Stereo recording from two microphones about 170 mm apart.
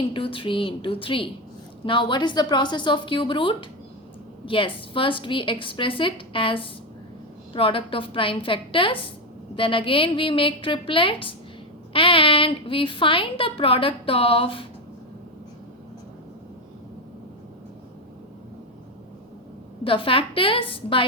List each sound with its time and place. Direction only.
0.1 s a child's voice: 30° left (ahead or behind)
19.8 s a child's voice: 30° left (ahead or behind)